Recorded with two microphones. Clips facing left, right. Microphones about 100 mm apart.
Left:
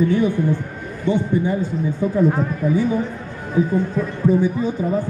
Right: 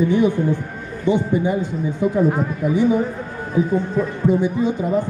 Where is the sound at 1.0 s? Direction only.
15° right (ahead or behind).